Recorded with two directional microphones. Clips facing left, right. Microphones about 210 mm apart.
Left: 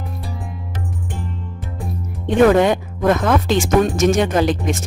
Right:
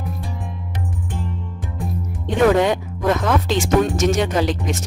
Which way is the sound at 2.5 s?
50° left (ahead or behind).